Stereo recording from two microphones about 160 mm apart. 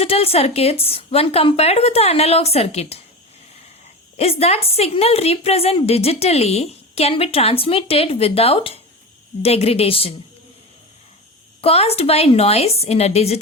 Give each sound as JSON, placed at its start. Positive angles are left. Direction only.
{"t": 0.0, "sound": "a woman's voice", "side_deg": 40}
{"t": 4.2, "sound": "a woman's voice", "side_deg": 40}
{"t": 11.6, "sound": "a woman's voice", "side_deg": 40}